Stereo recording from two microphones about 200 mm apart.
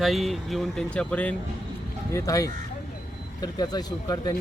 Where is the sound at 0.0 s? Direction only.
Centre (ahead or behind).